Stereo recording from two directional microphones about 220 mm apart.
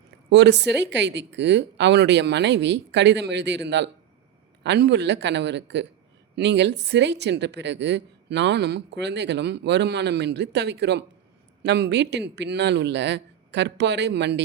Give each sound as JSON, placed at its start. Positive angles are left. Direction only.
{"t": 0.3, "sound": "speech", "side_deg": -50}